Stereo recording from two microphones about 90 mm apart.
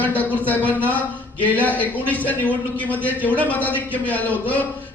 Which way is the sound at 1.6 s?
20° left (ahead or behind).